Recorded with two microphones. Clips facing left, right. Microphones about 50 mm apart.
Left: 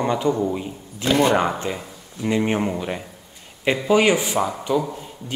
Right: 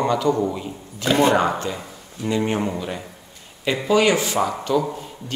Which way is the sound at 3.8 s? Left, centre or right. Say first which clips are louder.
Even; left.